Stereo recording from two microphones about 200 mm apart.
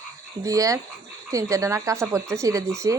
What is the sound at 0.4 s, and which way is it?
A woman's voice, 15° right (ahead or behind).